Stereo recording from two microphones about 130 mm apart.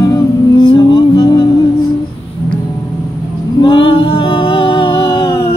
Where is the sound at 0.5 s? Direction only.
35° left (ahead or behind).